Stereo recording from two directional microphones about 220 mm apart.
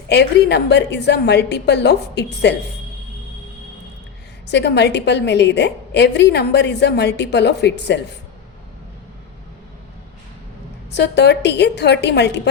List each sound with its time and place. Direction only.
0.1 s a woman's voice: 50° left (ahead or behind)
4.5 s a woman's voice: 50° left (ahead or behind)
10.9 s a woman's voice: 50° left (ahead or behind)